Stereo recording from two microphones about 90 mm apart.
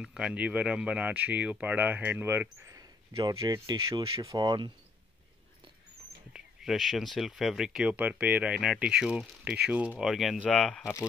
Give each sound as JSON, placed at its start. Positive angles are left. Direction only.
{"t": 0.0, "sound": "speech", "side_deg": -10}
{"t": 3.3, "sound": "speech", "side_deg": -40}
{"t": 4.5, "sound": "speech", "side_deg": -55}
{"t": 6.3, "sound": "speech", "side_deg": -5}
{"t": 10.0, "sound": "speech", "side_deg": -5}
{"t": 10.4, "sound": "speech", "side_deg": 10}